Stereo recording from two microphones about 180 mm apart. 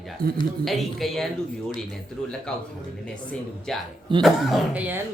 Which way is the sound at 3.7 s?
Centre (ahead or behind).